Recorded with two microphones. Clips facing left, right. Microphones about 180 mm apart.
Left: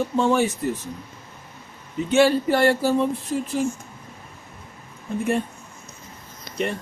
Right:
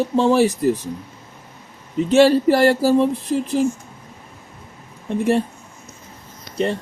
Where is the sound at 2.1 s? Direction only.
35° right (ahead or behind).